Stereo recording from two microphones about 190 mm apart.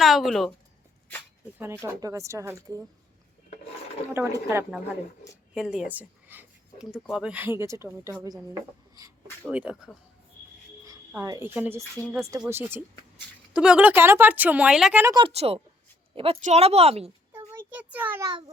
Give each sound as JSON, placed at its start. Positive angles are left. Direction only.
{"t": 0.0, "sound": "a woman's voice", "side_deg": 0}
{"t": 1.5, "sound": "speech", "side_deg": -10}
{"t": 4.1, "sound": "speech", "side_deg": -15}
{"t": 5.5, "sound": "speech", "side_deg": 0}
{"t": 9.5, "sound": "speech", "side_deg": -5}
{"t": 12.0, "sound": "speech", "side_deg": 10}
{"t": 12.5, "sound": "speech", "side_deg": -10}
{"t": 15.0, "sound": "speech", "side_deg": -20}
{"t": 15.3, "sound": "a woman's voice", "side_deg": -35}
{"t": 17.5, "sound": "a sound", "side_deg": -10}